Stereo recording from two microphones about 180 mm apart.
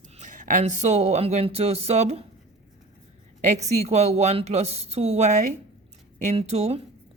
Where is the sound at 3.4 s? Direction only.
40° right (ahead or behind).